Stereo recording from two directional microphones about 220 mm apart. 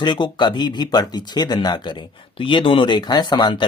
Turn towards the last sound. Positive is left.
turn(degrees=20)  # may be behind; listen again after turning